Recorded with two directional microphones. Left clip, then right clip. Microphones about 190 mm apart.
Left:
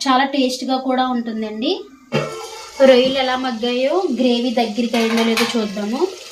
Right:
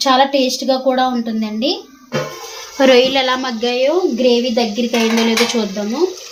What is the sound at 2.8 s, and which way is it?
A woman's voice, 45° right (ahead or behind).